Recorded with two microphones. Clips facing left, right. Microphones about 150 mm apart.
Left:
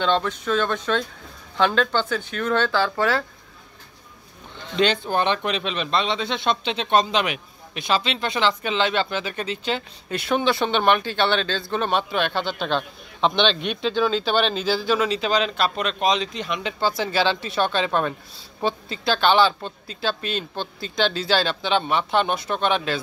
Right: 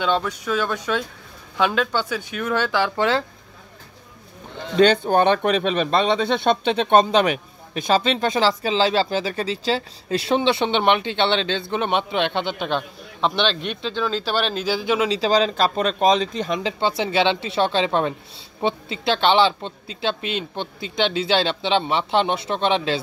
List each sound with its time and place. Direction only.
0.0 s speech: 10° right (ahead or behind)
5.1 s speech: 45° right (ahead or behind); by 12.8 s 15° right (ahead or behind)
13.2 s a man's voice: 5° right (ahead or behind)
13.6 s speech: 35° right (ahead or behind)
13.8 s speech: 5° left (ahead or behind); by 16.5 s 40° right (ahead or behind)
16.5 s speech: 25° right (ahead or behind)